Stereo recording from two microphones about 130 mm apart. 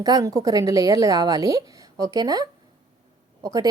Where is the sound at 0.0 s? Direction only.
25° right (ahead or behind).